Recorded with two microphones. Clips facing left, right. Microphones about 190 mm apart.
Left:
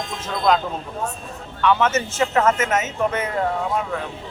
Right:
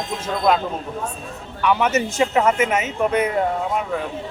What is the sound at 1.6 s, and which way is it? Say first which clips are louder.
Speech: even; 10° right (ahead or behind).